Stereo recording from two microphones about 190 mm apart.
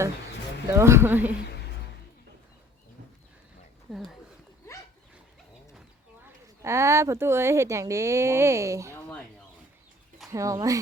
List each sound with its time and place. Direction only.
0.7 s speech: 15° right (ahead or behind)
3.9 s speech: centre (ahead or behind)
6.6 s speech: 15° right (ahead or behind)
8.9 s a sound: 10° left (ahead or behind)
10.3 s speech: 15° right (ahead or behind)